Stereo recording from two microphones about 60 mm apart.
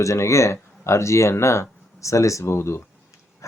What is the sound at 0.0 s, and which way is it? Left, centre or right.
Speech, left.